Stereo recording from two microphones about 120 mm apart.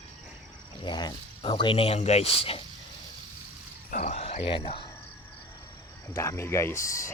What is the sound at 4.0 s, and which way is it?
Speech, 75° left (ahead or behind).